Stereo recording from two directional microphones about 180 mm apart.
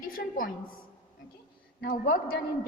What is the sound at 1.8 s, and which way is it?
Speech, 55° left (ahead or behind).